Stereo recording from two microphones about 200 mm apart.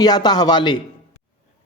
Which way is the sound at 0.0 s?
20° left (ahead or behind).